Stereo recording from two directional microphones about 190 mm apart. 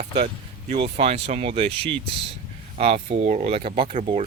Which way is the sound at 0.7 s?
35° right (ahead or behind).